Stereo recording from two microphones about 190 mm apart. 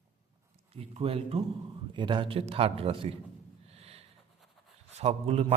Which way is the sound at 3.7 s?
30° right (ahead or behind).